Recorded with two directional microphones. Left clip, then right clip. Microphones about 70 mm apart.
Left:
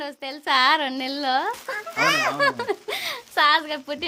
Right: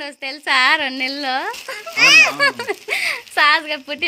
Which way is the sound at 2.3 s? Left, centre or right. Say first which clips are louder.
Right 4 dB; centre.